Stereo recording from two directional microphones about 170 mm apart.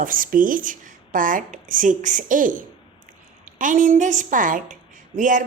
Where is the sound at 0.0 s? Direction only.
55° right (ahead or behind).